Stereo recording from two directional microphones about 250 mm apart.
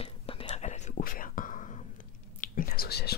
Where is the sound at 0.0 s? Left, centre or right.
Left.